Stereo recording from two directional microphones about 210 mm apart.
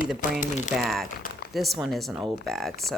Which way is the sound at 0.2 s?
35° left (ahead or behind).